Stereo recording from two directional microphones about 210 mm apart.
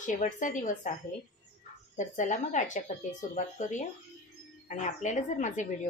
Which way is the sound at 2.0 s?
35° left (ahead or behind).